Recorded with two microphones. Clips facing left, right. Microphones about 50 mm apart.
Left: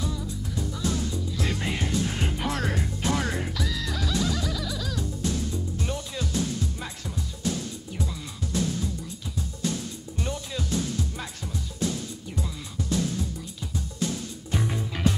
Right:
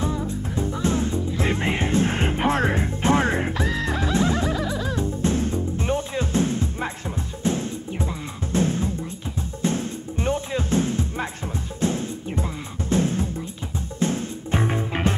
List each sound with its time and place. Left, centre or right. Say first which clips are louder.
0.0 s music: right 6 dB; right